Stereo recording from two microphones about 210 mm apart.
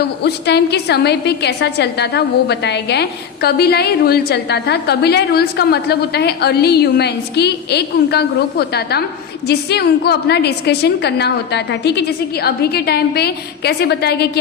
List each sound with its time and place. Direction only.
0.2 s a woman's voice: 50° left (ahead or behind)